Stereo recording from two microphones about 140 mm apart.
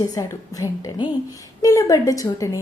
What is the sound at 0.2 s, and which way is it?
A woman's voice, 25° left (ahead or behind).